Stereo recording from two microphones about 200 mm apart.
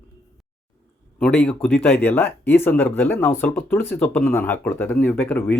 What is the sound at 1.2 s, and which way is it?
Speech, 5° left (ahead or behind).